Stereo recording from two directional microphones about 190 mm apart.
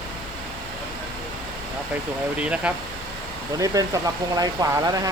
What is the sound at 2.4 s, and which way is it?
Speech, 5° right (ahead or behind).